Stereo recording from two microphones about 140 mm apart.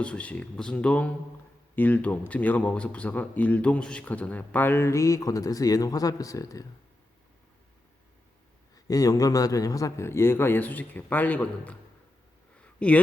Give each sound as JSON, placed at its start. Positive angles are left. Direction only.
{"t": 0.0, "sound": "speech", "side_deg": 10}
{"t": 8.7, "sound": "speech", "side_deg": 25}
{"t": 12.6, "sound": "a sound", "side_deg": 10}